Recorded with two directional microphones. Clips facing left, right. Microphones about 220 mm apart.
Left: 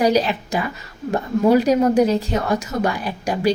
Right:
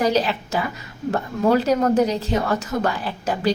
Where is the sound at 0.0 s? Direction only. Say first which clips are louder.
Left 3 dB; 15° left (ahead or behind).